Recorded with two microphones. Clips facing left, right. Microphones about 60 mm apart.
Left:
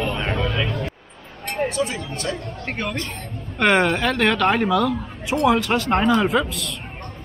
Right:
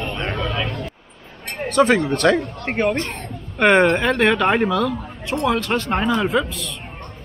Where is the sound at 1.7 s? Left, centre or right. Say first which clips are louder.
Right 9 dB; right.